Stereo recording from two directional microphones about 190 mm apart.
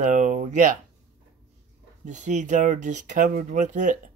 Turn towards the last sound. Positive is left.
turn(degrees=-40)  # may be behind; listen again after turning